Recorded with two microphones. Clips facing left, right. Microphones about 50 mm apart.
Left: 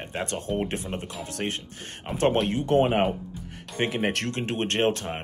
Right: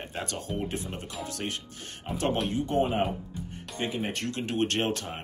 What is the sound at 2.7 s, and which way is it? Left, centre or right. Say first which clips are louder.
Speech: left 6 dB; left.